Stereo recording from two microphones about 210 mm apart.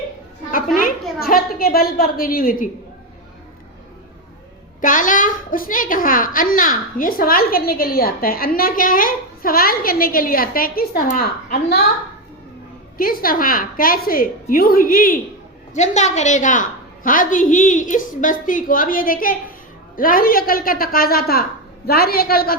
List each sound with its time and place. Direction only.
1.2 s a woman's voice: 45° left (ahead or behind)
4.8 s a woman's voice: 40° left (ahead or behind)
13.0 s a woman's voice: 45° left (ahead or behind)